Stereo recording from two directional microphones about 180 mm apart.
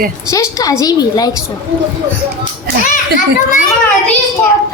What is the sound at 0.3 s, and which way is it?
A woman's voice, 20° left (ahead or behind).